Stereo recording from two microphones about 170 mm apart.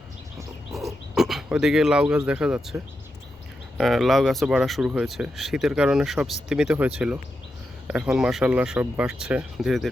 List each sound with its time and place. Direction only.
1.1 s speech: centre (ahead or behind)
3.8 s speech: centre (ahead or behind)